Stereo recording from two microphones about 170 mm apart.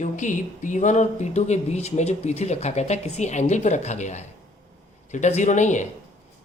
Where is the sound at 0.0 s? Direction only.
45° left (ahead or behind).